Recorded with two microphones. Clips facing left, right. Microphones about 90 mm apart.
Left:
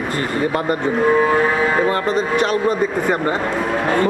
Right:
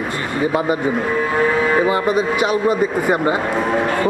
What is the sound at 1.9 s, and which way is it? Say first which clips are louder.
Speech: right 1 dB; 10° right (ahead or behind).